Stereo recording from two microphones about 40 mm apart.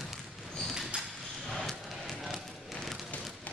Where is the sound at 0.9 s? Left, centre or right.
Right.